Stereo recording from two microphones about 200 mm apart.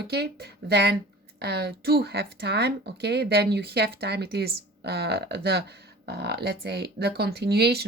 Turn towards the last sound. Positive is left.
turn(degrees=-55)  # may be behind; listen again after turning